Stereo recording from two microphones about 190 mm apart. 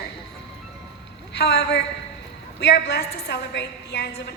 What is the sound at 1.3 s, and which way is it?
A woman's voice, 55° left (ahead or behind).